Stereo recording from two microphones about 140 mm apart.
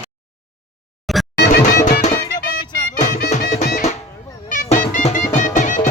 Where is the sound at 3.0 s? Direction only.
65° left (ahead or behind).